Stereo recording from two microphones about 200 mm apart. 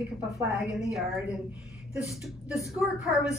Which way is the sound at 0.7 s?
Centre (ahead or behind).